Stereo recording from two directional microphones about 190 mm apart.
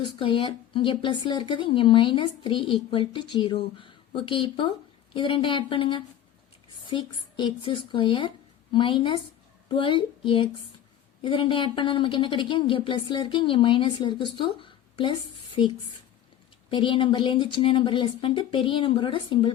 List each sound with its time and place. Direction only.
0.0 s speech: 25° left (ahead or behind)